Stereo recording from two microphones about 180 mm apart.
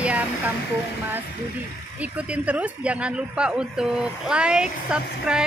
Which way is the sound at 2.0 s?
5° right (ahead or behind).